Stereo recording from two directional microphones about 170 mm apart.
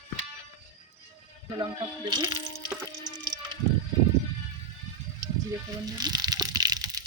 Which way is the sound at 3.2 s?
25° right (ahead or behind).